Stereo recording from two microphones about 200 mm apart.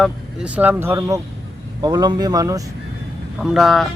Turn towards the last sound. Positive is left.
turn(degrees=0)  # may be behind; listen again after turning